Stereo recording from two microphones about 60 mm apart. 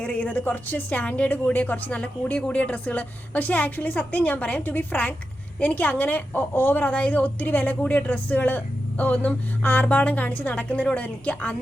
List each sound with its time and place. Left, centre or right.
0.0 s a woman's voice: left